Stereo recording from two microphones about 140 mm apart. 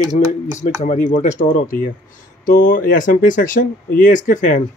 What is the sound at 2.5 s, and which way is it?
Speech, 75° left (ahead or behind).